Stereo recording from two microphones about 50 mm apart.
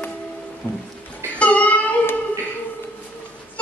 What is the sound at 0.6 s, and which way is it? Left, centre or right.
Music, left.